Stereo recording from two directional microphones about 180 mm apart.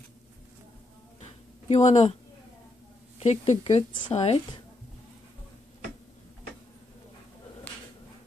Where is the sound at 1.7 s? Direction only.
40° left (ahead or behind).